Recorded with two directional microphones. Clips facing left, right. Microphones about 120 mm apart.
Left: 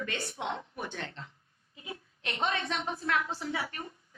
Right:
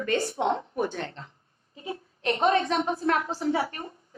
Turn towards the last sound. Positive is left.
turn(degrees=-35)  # may be behind; listen again after turning